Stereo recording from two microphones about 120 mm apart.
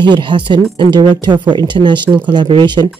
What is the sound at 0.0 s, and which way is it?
Speech, 40° right (ahead or behind).